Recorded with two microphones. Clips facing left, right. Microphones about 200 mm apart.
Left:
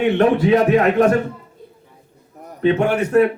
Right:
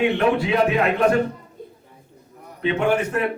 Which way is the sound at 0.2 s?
45° left (ahead or behind).